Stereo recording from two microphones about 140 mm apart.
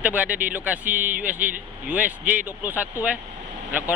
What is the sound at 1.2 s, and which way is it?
Speech, 10° right (ahead or behind).